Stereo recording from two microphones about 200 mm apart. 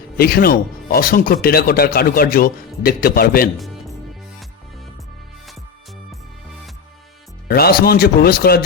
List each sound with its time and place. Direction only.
0.2 s speech: 50° left (ahead or behind)
7.4 s speech: 50° left (ahead or behind)